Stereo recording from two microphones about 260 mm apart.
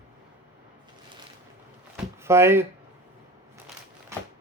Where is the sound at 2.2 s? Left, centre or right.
Centre.